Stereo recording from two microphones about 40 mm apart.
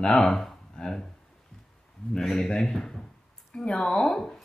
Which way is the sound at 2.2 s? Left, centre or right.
Centre.